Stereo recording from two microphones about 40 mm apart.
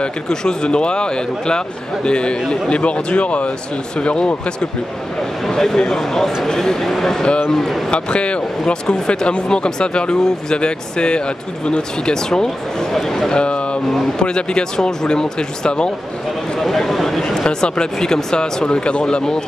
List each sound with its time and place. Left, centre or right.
0.0 s speech: centre
5.4 s speech: centre
7.9 s speech: left; by 13.3 s centre
13.3 s a sound: left
14.1 s speech: left
16.5 s a sound: centre
17.2 s speech: centre